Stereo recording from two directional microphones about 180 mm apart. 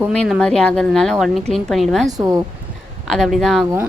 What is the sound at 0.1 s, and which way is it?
Speech, 5° left (ahead or behind).